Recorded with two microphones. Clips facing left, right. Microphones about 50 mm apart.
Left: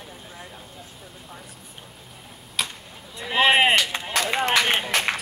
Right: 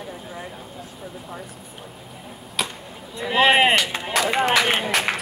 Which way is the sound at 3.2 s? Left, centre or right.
Centre.